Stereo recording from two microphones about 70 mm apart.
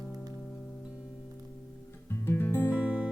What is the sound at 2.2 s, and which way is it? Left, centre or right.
Music, left.